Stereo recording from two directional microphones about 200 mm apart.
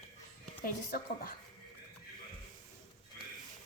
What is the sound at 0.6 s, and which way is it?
Speech, 50° left (ahead or behind).